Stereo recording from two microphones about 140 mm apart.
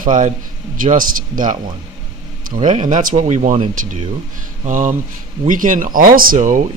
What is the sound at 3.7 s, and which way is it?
A man's voice, 70° right (ahead or behind).